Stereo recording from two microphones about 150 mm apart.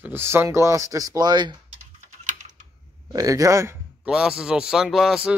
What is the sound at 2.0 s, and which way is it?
Typing, 55° right (ahead or behind).